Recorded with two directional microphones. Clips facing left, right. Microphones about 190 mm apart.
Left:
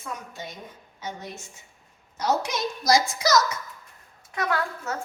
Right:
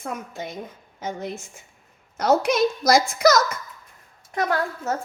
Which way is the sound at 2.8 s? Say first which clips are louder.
Even; 60° right (ahead or behind).